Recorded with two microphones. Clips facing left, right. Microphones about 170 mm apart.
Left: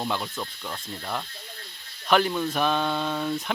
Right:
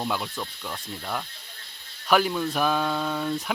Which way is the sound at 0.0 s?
Centre (ahead or behind).